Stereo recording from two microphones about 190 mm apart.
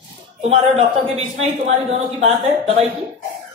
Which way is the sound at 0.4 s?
35° right (ahead or behind).